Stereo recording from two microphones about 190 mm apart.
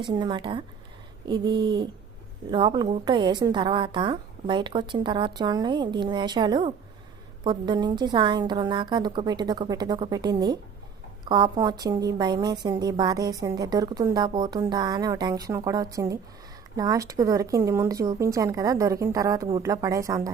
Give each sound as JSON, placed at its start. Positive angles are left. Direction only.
{"t": 0.0, "sound": "a woman's voice", "side_deg": -25}